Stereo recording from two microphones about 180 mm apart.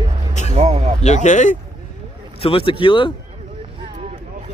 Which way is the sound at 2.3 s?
30° left (ahead or behind).